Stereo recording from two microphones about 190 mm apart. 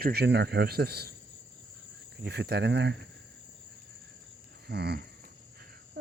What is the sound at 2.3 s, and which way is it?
Speech, 60° right (ahead or behind).